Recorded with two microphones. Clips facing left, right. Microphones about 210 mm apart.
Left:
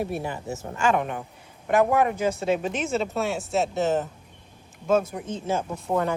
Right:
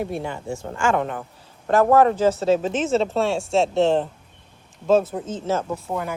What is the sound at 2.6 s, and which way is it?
Speech, 30° right (ahead or behind).